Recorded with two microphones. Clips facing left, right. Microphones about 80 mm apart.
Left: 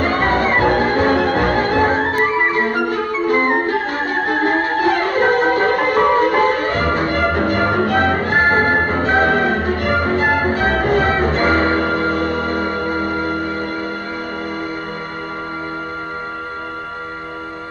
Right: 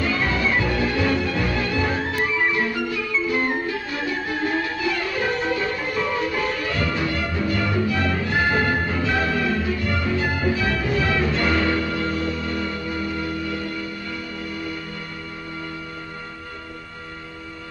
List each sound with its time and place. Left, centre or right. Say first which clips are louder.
0.0 s music: left 7 dB; left